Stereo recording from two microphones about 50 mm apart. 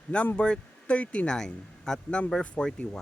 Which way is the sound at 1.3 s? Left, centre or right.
Centre.